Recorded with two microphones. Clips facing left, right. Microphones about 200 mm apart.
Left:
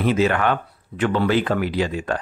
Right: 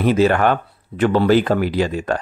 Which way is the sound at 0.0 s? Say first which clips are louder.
Right 4 dB; 40° right (ahead or behind).